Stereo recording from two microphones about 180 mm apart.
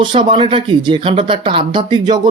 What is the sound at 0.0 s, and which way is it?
Speech, 25° right (ahead or behind).